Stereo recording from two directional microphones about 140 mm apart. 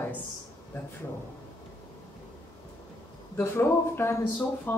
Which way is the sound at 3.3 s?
15° left (ahead or behind).